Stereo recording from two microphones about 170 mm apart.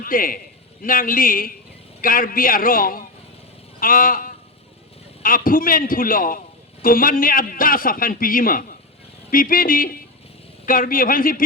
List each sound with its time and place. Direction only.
0.0 s a man's voice: 55° left (ahead or behind)
3.8 s sheep: 55° left (ahead or behind)
5.2 s a man's voice: 55° left (ahead or behind)